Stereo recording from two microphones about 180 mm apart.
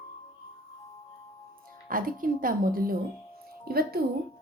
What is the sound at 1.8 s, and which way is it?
A woman's voice, 50° right (ahead or behind).